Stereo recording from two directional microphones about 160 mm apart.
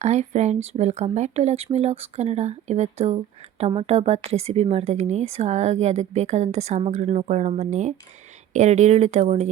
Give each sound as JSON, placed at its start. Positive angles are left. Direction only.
{"t": 0.0, "sound": "speech", "side_deg": -45}